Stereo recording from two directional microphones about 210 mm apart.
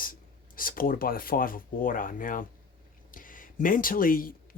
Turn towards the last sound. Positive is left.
turn(degrees=40)  # may be behind; listen again after turning